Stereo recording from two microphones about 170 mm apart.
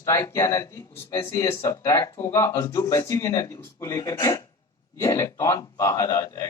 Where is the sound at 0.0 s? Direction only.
15° left (ahead or behind).